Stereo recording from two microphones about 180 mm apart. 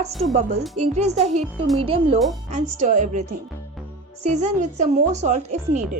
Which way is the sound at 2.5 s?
40° right (ahead or behind).